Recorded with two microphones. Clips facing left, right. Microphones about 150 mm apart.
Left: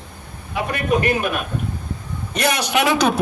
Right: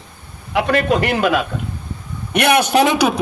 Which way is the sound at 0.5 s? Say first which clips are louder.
Right 4 dB; 85° right.